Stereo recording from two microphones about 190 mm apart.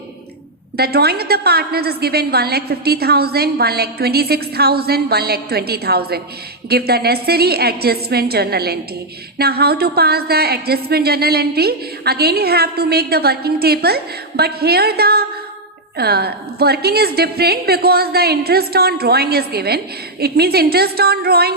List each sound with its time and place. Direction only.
0.8 s a woman's voice: 55° right (ahead or behind)